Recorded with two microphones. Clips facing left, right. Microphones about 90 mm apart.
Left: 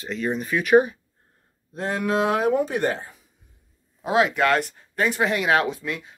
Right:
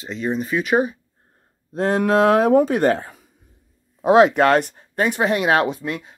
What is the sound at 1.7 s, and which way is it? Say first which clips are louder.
Speech: right 6 dB; 45° right (ahead or behind).